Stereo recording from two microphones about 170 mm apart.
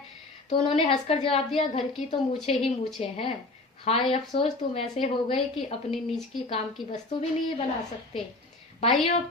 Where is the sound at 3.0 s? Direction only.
35° left (ahead or behind).